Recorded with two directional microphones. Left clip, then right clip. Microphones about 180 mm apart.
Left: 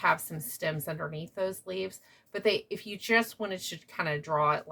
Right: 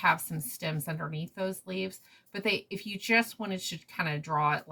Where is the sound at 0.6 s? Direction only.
25° left (ahead or behind).